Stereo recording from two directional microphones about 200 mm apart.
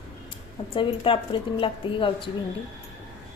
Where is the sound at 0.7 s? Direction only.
25° left (ahead or behind).